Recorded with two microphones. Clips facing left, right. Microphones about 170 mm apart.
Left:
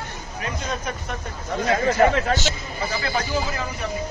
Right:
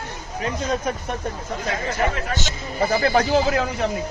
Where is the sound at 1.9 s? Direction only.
55° left (ahead or behind).